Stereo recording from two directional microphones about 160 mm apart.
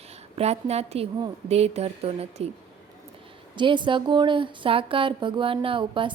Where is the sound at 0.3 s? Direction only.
40° right (ahead or behind).